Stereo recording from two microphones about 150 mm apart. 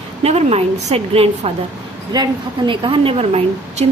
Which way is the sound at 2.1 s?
30° right (ahead or behind).